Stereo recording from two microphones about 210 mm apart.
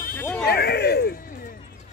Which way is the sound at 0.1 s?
10° left (ahead or behind).